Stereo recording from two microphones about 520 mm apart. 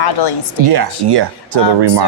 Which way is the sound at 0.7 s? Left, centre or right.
Right.